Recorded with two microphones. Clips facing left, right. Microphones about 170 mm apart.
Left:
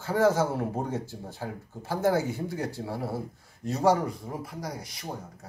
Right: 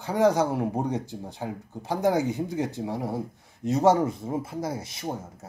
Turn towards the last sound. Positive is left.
turn(degrees=-25)  # may be behind; listen again after turning